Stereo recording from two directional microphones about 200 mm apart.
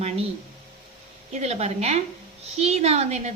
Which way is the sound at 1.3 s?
35° right (ahead or behind).